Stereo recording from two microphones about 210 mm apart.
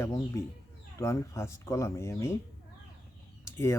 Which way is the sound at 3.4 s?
15° left (ahead or behind).